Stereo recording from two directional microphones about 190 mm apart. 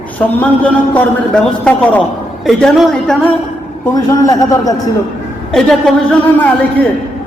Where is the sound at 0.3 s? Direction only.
10° left (ahead or behind).